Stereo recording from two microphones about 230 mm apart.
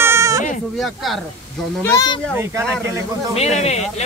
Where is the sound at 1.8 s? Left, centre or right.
Centre.